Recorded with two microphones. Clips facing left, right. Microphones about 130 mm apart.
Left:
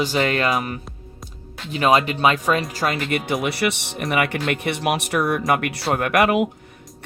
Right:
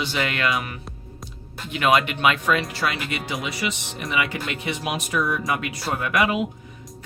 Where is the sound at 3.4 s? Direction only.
65° left (ahead or behind).